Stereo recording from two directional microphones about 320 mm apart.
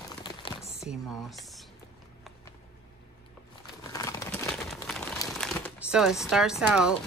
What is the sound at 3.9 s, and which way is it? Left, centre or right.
Crumpling, centre.